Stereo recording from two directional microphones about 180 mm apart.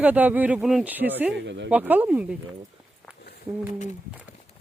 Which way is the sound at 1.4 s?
80° right.